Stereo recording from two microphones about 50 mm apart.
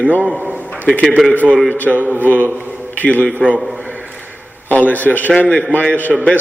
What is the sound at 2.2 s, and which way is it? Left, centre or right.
A man's voice, left.